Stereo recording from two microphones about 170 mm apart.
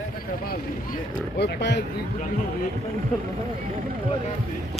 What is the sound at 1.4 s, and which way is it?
Speech, 90° left.